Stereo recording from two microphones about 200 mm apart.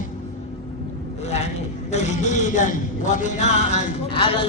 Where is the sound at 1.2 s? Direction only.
35° left (ahead or behind).